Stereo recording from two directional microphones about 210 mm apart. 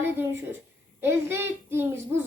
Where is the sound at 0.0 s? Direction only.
10° right (ahead or behind).